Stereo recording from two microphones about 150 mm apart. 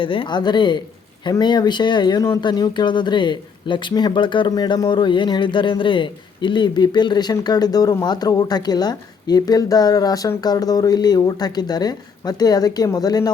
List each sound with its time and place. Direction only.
0.0 s speech: 35° left (ahead or behind)